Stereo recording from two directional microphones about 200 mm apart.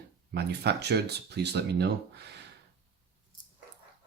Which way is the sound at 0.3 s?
55° right (ahead or behind).